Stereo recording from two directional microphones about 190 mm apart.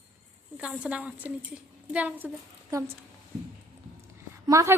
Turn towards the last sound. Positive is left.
turn(degrees=-15)  # may be behind; listen again after turning